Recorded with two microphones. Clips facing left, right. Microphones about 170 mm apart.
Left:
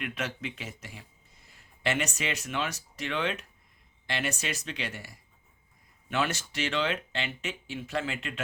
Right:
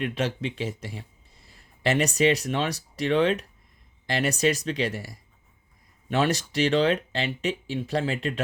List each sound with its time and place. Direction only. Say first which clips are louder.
0.0 s speech: right 7 dB; 30° right (ahead or behind)